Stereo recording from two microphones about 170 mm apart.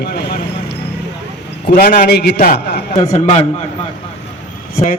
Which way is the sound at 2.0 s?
70° left (ahead or behind).